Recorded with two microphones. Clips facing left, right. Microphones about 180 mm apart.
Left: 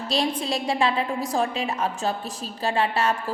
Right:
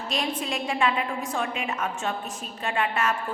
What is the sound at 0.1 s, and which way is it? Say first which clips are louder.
A woman's voice: left 4 dB; 35° left (ahead or behind).